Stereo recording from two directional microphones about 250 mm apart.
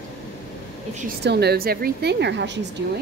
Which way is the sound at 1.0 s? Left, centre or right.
Right.